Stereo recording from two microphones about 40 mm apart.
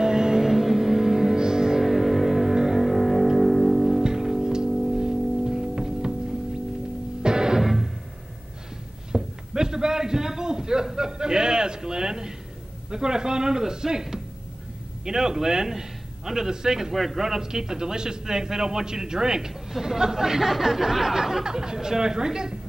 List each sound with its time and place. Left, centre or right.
0.0 s music: centre
0.5 s music: centre
1.9 s music: centre
4.0 s music: centre
7.2 s music: centre
7.6 s music: centre
9.1 s a sound: centre
12.9 s speech: centre
16.9 s speech: centre